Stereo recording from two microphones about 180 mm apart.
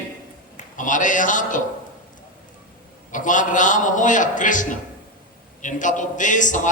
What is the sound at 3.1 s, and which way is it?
A man's voice, 45° left (ahead or behind).